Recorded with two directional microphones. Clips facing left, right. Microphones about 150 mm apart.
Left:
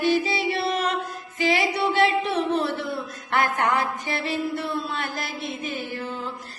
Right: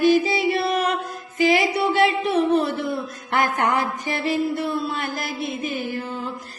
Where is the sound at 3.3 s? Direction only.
15° right (ahead or behind).